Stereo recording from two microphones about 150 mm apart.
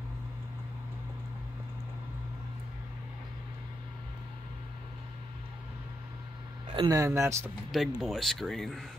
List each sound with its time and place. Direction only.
6.7 s a sound: 35° right (ahead or behind)
7.0 s speech: 20° right (ahead or behind)
7.7 s speech: centre (ahead or behind)